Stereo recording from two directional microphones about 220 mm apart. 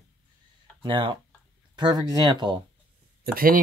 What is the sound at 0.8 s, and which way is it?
Speech, 20° right (ahead or behind).